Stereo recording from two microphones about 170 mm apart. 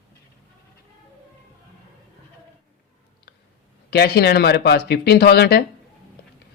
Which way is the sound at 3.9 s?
70° left (ahead or behind).